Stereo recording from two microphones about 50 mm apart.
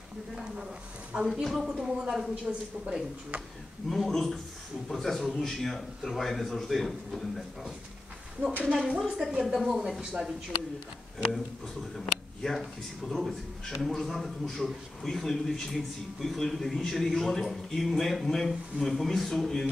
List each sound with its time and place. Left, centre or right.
1.1 s speech: centre
1.4 s a man's voice: centre
1.7 s speech: centre
3.9 s a man's voice: centre
8.7 s a man's voice: centre
9.0 s speech: centre
12.4 s a man's voice: centre